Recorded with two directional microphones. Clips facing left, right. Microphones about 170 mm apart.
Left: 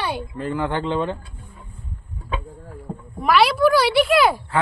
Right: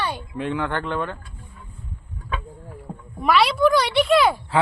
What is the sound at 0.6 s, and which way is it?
Speech, 15° left (ahead or behind).